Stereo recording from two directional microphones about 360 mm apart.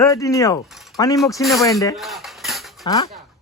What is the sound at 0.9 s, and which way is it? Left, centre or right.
Dishes, centre.